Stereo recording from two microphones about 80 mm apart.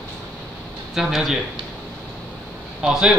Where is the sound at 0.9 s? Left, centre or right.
Centre.